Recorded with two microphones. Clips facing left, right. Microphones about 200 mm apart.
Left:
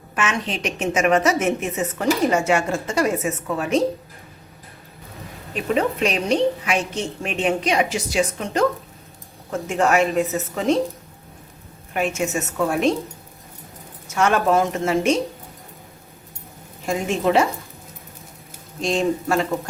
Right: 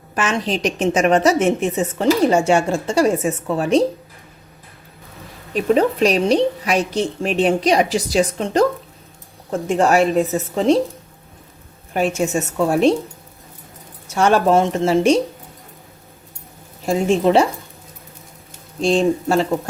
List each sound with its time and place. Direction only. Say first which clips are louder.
0.2 s a woman's voice: right 4 dB; 35° right (ahead or behind)
5.5 s a woman's voice: right 5 dB; 40° right (ahead or behind)
11.9 s a woman's voice: right 4 dB; 35° right (ahead or behind)
14.1 s a woman's voice: right 4 dB; 30° right (ahead or behind)
16.8 s a woman's voice: right 5 dB; 30° right (ahead or behind)
18.8 s a woman's voice: right 5 dB; 30° right (ahead or behind)